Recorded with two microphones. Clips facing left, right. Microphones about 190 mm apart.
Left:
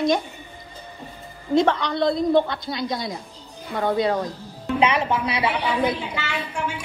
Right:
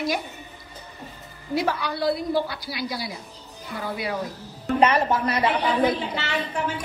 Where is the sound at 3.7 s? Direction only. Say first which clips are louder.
Left 8 dB; 65° left (ahead or behind).